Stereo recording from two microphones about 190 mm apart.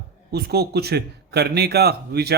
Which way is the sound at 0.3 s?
60° right (ahead or behind).